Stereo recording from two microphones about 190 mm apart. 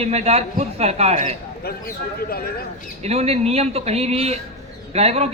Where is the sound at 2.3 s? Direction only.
55° left (ahead or behind).